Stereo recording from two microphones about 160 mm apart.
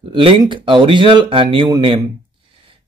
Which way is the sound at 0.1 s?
30° right (ahead or behind).